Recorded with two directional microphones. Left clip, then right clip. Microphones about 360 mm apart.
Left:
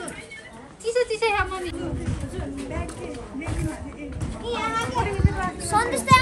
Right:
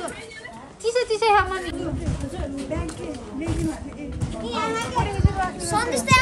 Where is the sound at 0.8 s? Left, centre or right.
Right.